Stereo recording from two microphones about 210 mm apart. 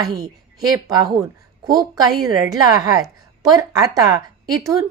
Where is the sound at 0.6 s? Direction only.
20° right (ahead or behind).